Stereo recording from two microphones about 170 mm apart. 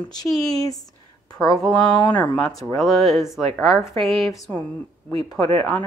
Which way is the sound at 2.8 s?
Centre (ahead or behind).